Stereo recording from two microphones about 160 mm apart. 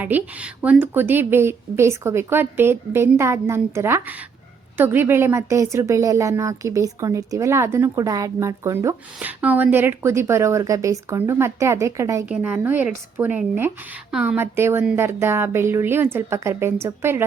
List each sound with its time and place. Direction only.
0.0 s a woman's voice: 10° right (ahead or behind)